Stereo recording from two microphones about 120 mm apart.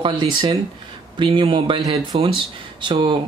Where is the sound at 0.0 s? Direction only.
45° right (ahead or behind).